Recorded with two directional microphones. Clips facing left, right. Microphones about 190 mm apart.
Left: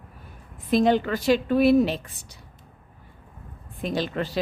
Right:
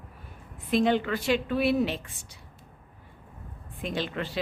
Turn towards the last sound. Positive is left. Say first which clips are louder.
# left 4 dB
turn(degrees=40)  # may be behind; listen again after turning